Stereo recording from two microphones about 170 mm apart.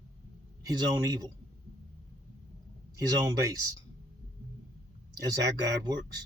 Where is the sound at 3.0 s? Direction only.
20° right (ahead or behind).